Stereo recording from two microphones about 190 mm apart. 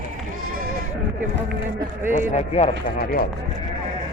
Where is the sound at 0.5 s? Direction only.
50° right (ahead or behind).